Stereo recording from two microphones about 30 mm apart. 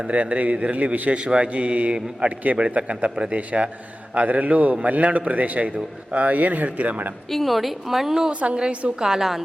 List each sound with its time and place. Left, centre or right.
0.0 s a man's voice: right
4.1 s a man's voice: right
7.3 s speech: centre
8.3 s a man's voice: right
9.0 s a woman's voice: centre